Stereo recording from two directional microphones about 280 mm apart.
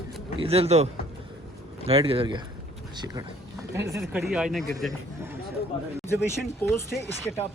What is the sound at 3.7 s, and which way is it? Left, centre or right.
Speech, centre.